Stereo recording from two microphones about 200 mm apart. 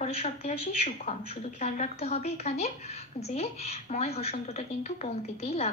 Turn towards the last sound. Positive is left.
turn(degrees=30)  # may be behind; listen again after turning